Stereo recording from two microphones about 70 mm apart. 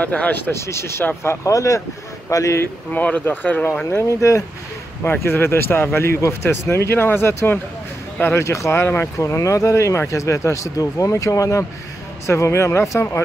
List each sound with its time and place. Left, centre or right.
0.0 s speech: left
0.5 s speech: left
2.6 s speech: left
3.8 s speech: left
5.0 s speech: left
8.5 s speech: left
8.8 s speech: left
9.2 s speech: left